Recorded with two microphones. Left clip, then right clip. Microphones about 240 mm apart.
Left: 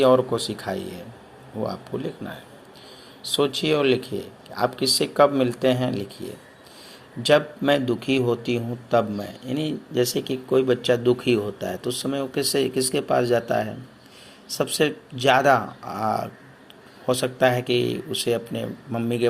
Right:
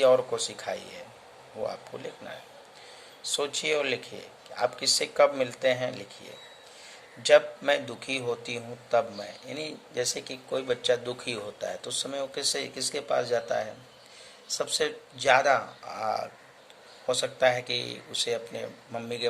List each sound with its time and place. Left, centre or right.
0.0 s a man's voice: centre
3.2 s a man's voice: centre
7.3 s a man's voice: centre